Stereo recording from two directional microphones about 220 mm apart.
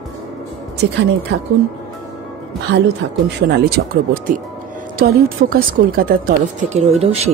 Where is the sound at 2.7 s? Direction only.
50° right (ahead or behind).